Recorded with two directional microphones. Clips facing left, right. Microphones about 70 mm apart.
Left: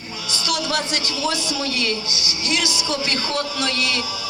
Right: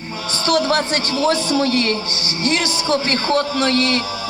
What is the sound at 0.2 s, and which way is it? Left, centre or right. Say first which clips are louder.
A man's voice: right 7 dB; right.